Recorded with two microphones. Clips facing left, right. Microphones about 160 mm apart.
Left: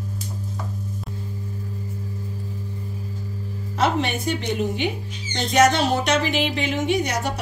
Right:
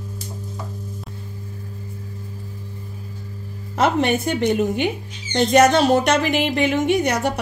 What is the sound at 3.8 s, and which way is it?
A woman's voice, 50° right (ahead or behind).